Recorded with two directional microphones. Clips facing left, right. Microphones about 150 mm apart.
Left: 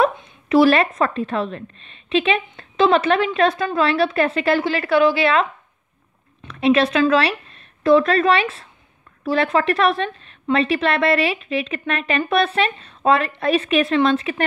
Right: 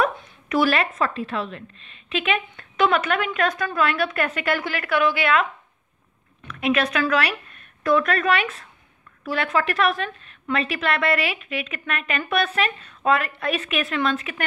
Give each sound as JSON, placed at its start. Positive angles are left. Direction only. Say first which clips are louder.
{"t": 0.0, "sound": "a woman's voice", "louder": "left 4 dB", "side_deg": 30}